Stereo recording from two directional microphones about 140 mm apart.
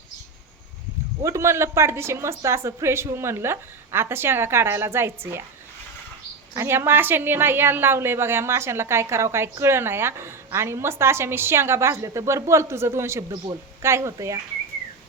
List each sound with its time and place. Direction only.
1.2 s a woman's voice: 20° right (ahead or behind)
6.5 s a woman's voice: 20° right (ahead or behind)